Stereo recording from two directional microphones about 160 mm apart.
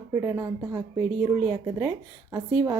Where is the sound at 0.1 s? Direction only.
25° right (ahead or behind).